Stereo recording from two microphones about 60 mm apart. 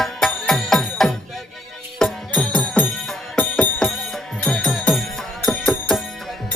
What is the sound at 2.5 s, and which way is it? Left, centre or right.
Music, left.